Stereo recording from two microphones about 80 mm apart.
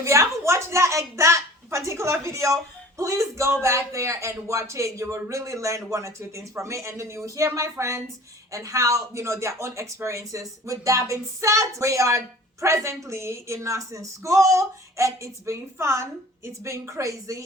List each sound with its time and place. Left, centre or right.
0.0 s speech: right